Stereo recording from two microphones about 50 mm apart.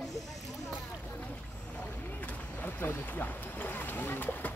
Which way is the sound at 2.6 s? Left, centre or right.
Left.